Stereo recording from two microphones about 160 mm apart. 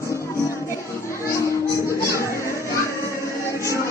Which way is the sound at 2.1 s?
20° left (ahead or behind).